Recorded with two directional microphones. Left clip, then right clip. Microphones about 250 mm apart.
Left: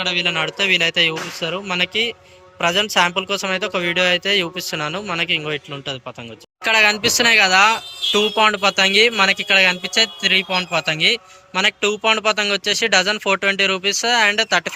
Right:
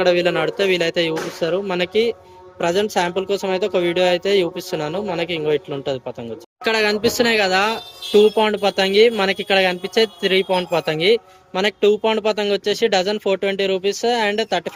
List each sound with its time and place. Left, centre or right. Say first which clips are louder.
0.0 s speech: right 3 dB; centre